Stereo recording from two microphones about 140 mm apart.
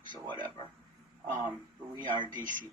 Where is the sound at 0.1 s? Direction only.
30° right (ahead or behind).